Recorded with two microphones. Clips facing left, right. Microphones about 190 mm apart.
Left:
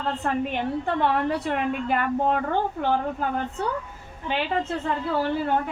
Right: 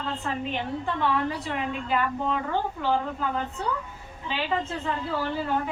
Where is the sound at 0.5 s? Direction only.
55° left (ahead or behind).